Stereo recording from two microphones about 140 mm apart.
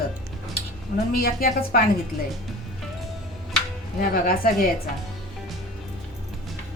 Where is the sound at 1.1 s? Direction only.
90° left.